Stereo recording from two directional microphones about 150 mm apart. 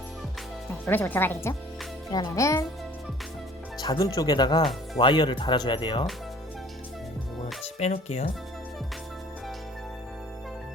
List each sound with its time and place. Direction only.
0.9 s speech: 15° left (ahead or behind)
2.0 s speech: 25° left (ahead or behind)
3.8 s speech: 30° left (ahead or behind)
7.4 s music: 50° left (ahead or behind)